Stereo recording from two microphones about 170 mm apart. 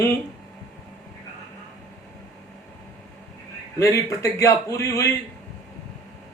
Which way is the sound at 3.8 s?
20° left (ahead or behind).